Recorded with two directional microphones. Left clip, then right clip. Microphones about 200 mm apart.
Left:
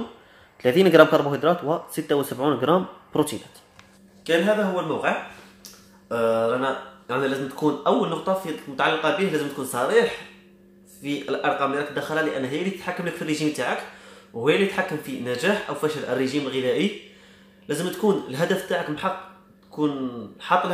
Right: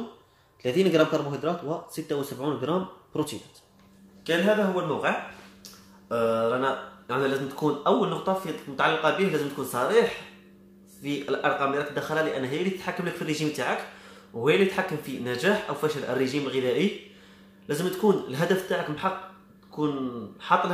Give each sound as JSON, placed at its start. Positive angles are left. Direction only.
{"t": 0.6, "sound": "speech", "side_deg": 15}
{"t": 4.2, "sound": "speech", "side_deg": 0}
{"t": 20.3, "sound": "speech", "side_deg": 0}